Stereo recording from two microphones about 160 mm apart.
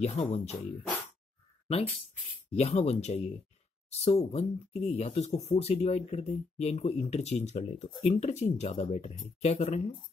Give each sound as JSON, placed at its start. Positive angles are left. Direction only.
{"t": 0.0, "sound": "speech", "side_deg": 40}
{"t": 2.5, "sound": "speech", "side_deg": 40}